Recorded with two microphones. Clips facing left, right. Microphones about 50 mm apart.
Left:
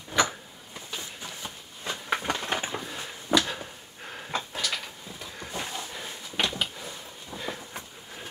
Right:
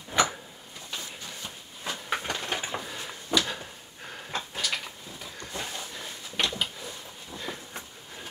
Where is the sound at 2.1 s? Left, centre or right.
Centre.